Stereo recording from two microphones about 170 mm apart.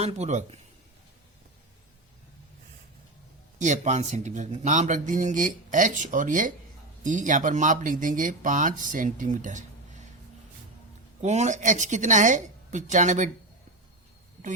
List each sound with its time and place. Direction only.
0.0 s speech: 40° right (ahead or behind)
3.6 s speech: 45° right (ahead or behind)
11.2 s speech: 40° right (ahead or behind)